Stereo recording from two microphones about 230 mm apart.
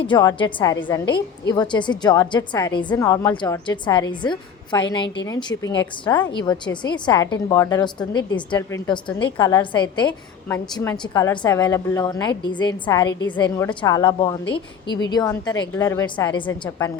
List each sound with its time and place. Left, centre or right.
0.0 s a woman's voice: centre